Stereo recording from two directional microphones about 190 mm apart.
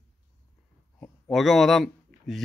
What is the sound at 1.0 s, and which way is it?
Speech, centre (ahead or behind).